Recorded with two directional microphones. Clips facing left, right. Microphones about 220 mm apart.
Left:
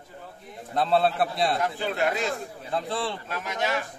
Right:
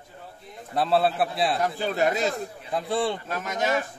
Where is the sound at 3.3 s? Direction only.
45° right (ahead or behind).